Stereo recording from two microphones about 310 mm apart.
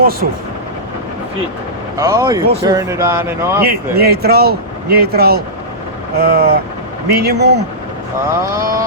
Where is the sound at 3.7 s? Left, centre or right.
Right.